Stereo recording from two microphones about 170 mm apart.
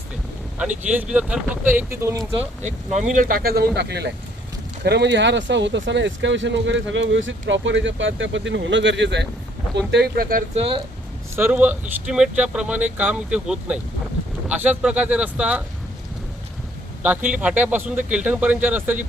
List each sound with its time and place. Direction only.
0.6 s speech: 10° right (ahead or behind)
2.6 s speech: 45° right (ahead or behind); by 4.1 s 75° right (ahead or behind)
4.8 s speech: 90° right
9.9 s speech: 70° right (ahead or behind)
10.5 s speech: 35° right (ahead or behind)
11.3 s speech: 10° right (ahead or behind)
17.3 s speech: 10° right (ahead or behind)